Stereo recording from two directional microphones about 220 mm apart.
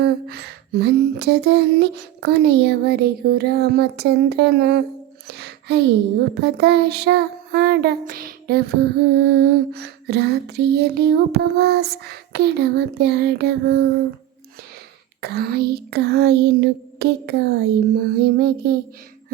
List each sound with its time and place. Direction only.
0.0 s child singing: 45° right (ahead or behind)
5.3 s a sound: 50° right (ahead or behind)
6.4 s child singing: 45° right (ahead or behind)
15.2 s child singing: 45° right (ahead or behind)